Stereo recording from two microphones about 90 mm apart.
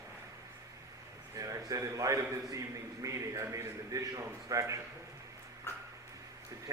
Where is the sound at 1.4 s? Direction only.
40° right (ahead or behind).